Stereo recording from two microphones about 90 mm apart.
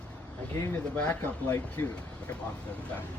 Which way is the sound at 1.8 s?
30° left (ahead or behind).